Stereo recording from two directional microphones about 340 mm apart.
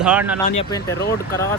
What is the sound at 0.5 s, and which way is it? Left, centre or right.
Speech, centre.